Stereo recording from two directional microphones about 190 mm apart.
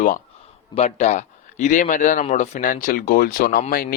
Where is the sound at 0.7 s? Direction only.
35° left (ahead or behind).